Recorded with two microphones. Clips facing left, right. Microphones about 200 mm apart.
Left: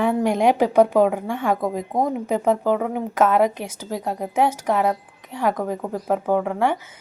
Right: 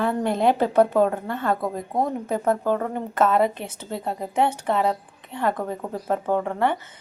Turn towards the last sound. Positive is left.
turn(degrees=10)  # may be behind; listen again after turning